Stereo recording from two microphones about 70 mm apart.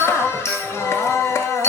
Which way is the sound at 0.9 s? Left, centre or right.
Left.